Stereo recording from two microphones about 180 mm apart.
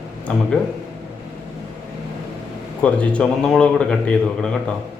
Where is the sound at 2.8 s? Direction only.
5° left (ahead or behind).